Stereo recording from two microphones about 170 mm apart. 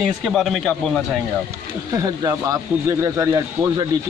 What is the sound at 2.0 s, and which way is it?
Speech, 20° right (ahead or behind).